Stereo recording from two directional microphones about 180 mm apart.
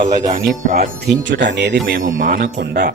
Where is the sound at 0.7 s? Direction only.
65° right (ahead or behind).